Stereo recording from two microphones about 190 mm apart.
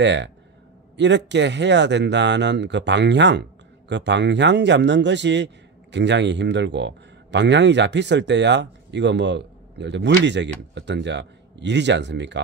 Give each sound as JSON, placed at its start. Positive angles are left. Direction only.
{"t": 0.0, "sound": "a man's voice", "side_deg": -70}